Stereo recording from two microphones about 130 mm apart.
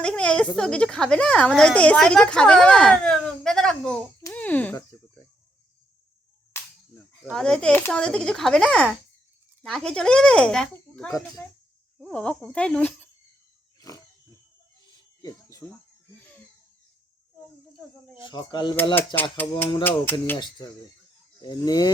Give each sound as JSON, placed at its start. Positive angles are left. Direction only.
{"t": 0.0, "sound": "speech", "side_deg": 5}
{"t": 4.3, "sound": "a sound", "side_deg": 10}
{"t": 7.3, "sound": "speech", "side_deg": 5}
{"t": 13.7, "sound": "pig", "side_deg": 25}
{"t": 15.2, "sound": "cricket", "side_deg": 25}
{"t": 18.3, "sound": "speech", "side_deg": 35}
{"t": 18.9, "sound": "speech", "side_deg": 15}
{"t": 20.6, "sound": "speech", "side_deg": 30}